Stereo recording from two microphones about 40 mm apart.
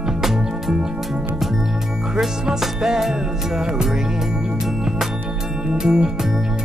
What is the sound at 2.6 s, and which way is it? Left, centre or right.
Music, centre.